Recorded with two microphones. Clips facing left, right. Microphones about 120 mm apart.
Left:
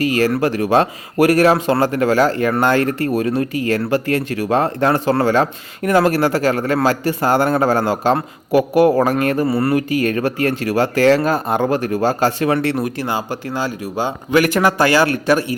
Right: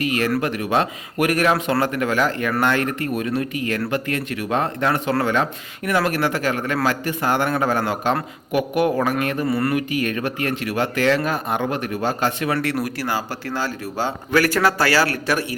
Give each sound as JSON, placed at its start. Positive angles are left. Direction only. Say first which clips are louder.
{"t": 0.0, "sound": "speech", "louder": "left 5 dB", "side_deg": 35}
{"t": 12.5, "sound": "a man's voice", "louder": "left 4 dB", "side_deg": 20}